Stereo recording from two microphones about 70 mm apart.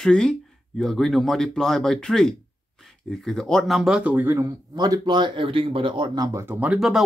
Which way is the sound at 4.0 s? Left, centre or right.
Right.